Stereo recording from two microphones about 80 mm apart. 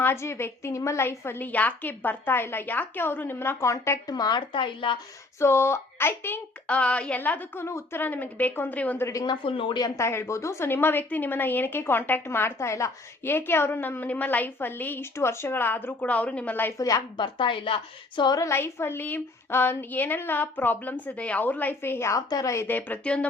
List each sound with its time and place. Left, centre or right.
0.0 s a woman's voice: left
4.0 s speech: left
5.4 s speech: left
6.7 s a woman's voice: centre; by 8.0 s left
8.0 s a woman's voice: left
9.0 s speech: left
9.2 s speech: left
9.8 s a woman's voice: left
16.7 s a woman's voice: left
17.2 s speech: left
18.3 s a woman's voice: left
22.1 s speech: left
22.6 s a woman's voice: left